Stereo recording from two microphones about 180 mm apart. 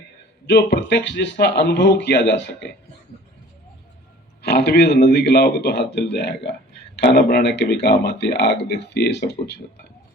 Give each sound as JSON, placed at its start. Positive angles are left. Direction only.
{"t": 0.4, "sound": "speech", "side_deg": 70}
{"t": 4.4, "sound": "speech", "side_deg": 65}